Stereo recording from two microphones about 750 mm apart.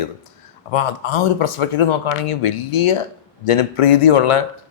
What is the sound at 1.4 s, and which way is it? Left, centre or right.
Speech, left.